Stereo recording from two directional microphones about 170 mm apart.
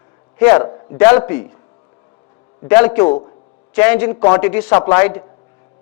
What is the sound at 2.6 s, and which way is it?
A man's voice, 10° left (ahead or behind).